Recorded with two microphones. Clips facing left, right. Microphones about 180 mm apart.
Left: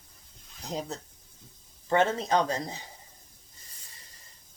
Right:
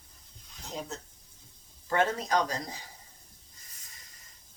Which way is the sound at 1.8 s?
25° left (ahead or behind).